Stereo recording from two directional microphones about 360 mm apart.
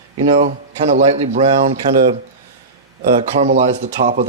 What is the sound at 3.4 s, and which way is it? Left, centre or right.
Speech, centre.